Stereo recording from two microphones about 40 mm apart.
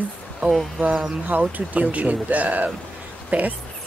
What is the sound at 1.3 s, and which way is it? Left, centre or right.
Speech, right.